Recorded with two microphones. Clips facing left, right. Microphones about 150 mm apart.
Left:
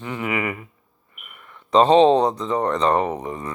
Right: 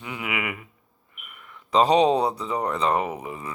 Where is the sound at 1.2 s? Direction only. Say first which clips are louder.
Left 1 dB; 30° left (ahead or behind).